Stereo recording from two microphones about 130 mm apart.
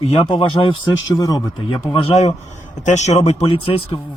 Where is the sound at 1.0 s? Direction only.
25° left (ahead or behind).